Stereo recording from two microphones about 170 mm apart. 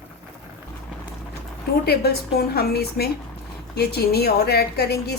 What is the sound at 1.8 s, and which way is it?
A woman's voice, 65° left (ahead or behind).